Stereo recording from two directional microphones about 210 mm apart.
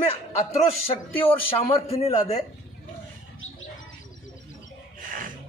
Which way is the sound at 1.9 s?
30° left (ahead or behind).